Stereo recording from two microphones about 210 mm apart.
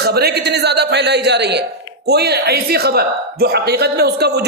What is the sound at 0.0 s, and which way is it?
Speech, 50° right (ahead or behind).